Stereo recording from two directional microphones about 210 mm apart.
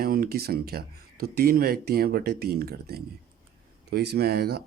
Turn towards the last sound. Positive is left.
turn(degrees=-50)  # may be behind; listen again after turning